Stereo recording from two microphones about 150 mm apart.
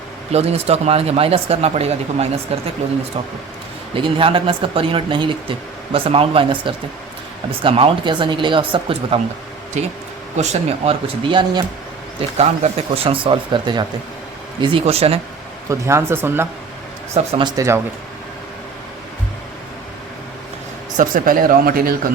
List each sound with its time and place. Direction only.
0.3 s speech: 45° right (ahead or behind)
3.9 s speech: 35° right (ahead or behind)
10.3 s speech: 45° right (ahead or behind)
11.3 s speech: 30° right (ahead or behind)
12.4 s speech: 45° right (ahead or behind)
15.7 s speech: 20° right (ahead or behind)
17.2 s speech: 45° right (ahead or behind)
17.6 s speech: 25° right (ahead or behind)
20.9 s speech: 60° right (ahead or behind); by 21.9 s 80° right